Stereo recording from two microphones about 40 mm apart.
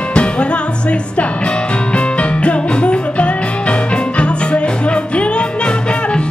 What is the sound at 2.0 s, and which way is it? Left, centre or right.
Music, left.